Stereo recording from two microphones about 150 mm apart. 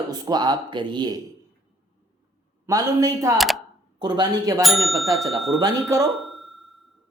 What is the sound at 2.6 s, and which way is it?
Speech, 20° right (ahead or behind).